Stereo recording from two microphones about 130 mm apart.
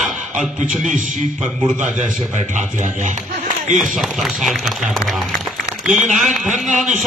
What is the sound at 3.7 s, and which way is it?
A man's voice, centre (ahead or behind).